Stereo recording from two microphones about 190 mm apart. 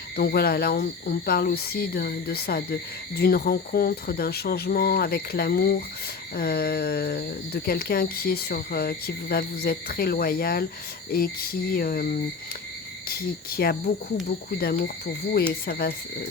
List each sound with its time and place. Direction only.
0.2 s speech: 50° left (ahead or behind)
13.1 s speech: 55° left (ahead or behind)